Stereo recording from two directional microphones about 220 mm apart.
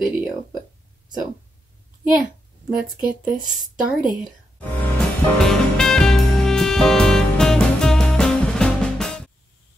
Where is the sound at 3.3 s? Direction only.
35° right (ahead or behind).